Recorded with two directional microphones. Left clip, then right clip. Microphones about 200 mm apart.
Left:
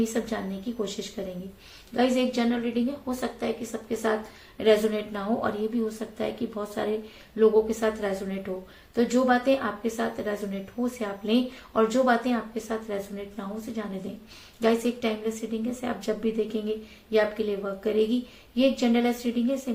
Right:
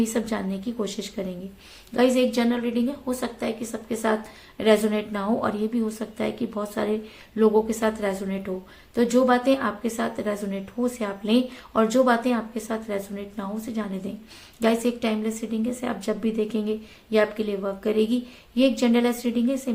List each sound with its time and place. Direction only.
0.0 s a woman's voice: 40° right (ahead or behind)